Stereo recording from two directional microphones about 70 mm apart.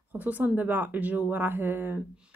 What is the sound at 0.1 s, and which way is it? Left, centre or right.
A woman's voice, right.